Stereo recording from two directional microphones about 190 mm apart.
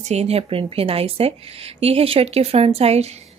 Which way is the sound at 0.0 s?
35° right (ahead or behind).